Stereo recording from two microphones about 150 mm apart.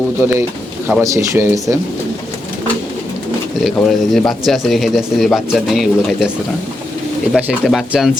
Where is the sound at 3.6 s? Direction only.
Centre (ahead or behind).